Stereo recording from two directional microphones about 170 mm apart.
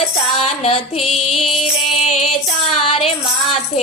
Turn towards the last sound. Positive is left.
turn(degrees=35)  # may be behind; listen again after turning